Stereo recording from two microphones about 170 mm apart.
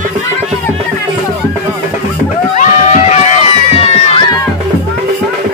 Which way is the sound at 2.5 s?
40° left (ahead or behind).